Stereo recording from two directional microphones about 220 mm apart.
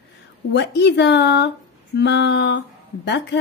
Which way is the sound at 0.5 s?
50° left (ahead or behind).